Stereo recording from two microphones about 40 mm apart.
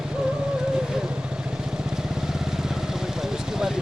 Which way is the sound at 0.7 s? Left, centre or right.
Centre.